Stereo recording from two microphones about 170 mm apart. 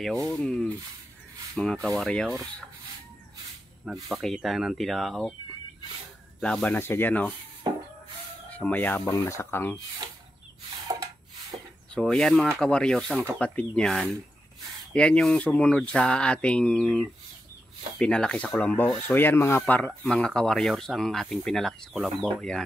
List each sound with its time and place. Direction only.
0.3 s speech: 5° left (ahead or behind)
3.8 s speech: centre (ahead or behind)
6.4 s speech: 5° left (ahead or behind)
8.5 s speech: 10° left (ahead or behind)
10.0 s a sound: 25° right (ahead or behind)
11.5 s a sound: 30° right (ahead or behind)
11.9 s speech: 5° left (ahead or behind)
13.1 s speech: 15° right (ahead or behind)
13.4 s speech: 5° left (ahead or behind)